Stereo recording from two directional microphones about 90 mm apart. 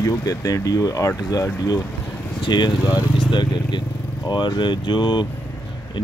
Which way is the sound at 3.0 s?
60° left (ahead or behind).